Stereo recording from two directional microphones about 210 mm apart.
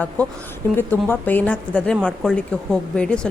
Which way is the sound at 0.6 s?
10° left (ahead or behind).